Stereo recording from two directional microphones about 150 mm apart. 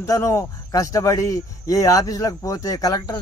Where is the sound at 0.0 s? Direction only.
20° left (ahead or behind).